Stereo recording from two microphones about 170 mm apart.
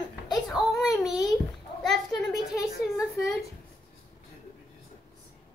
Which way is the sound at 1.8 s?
Centre (ahead or behind).